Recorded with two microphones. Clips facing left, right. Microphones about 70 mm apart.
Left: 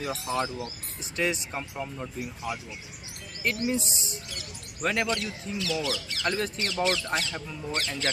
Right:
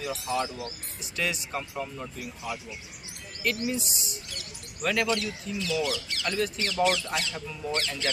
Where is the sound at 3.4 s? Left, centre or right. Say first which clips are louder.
Left 1 dB; left.